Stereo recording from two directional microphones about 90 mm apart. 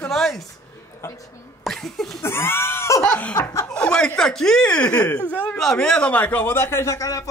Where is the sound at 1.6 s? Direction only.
5° left (ahead or behind).